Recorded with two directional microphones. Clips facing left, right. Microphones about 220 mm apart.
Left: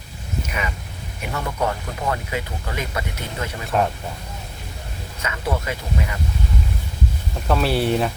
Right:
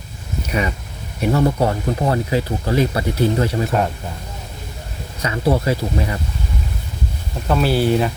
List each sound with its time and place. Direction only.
1.2 s speech: 35° right (ahead or behind)
5.2 s speech: 35° right (ahead or behind)
7.4 s speech: centre (ahead or behind)